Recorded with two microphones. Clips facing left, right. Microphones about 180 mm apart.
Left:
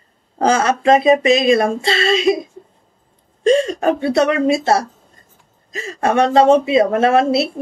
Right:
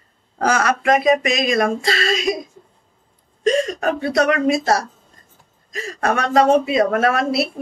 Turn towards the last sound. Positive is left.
turn(degrees=25)  # may be behind; listen again after turning